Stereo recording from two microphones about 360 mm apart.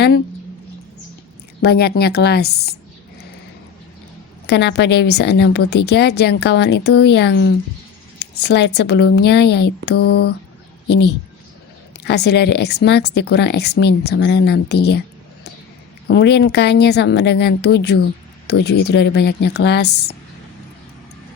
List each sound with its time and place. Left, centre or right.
1.6 s speech: left
4.4 s a woman's voice: left
16.0 s speech: left